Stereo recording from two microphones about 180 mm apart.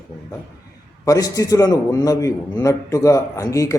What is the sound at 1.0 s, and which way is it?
A man's voice, 20° left (ahead or behind).